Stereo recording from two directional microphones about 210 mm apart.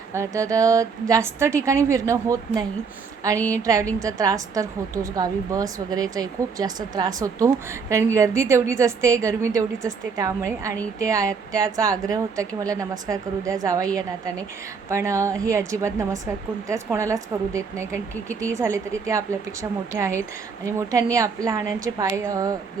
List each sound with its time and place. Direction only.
0.1 s speech: 15° right (ahead or behind)